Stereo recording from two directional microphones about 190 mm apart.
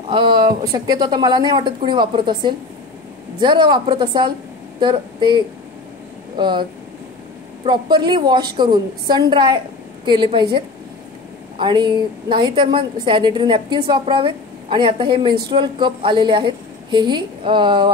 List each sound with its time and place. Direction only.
0.1 s a woman's voice: 25° right (ahead or behind)
7.6 s a woman's voice: 25° right (ahead or behind)